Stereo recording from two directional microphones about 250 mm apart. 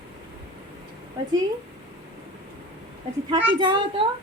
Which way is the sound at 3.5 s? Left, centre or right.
Right.